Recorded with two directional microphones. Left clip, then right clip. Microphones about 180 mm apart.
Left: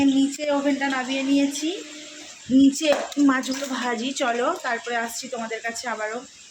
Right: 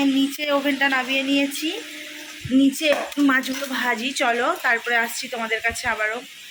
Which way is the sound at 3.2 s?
10° left (ahead or behind).